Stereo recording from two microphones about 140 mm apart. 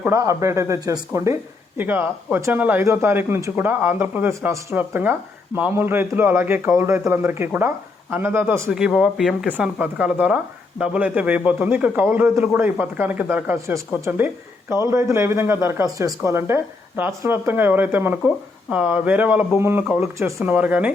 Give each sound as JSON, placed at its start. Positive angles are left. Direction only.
{"t": 0.0, "sound": "speech", "side_deg": -20}
{"t": 8.7, "sound": "speech", "side_deg": -5}